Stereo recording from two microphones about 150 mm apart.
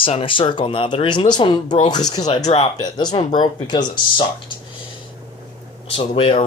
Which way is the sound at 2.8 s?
30° left (ahead or behind).